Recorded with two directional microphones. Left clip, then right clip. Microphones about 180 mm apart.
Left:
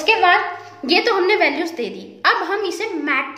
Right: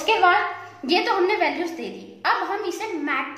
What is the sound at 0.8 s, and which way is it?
A woman's voice, 35° left (ahead or behind).